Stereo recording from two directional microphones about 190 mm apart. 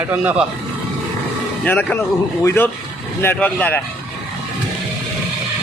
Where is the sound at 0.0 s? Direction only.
10° right (ahead or behind).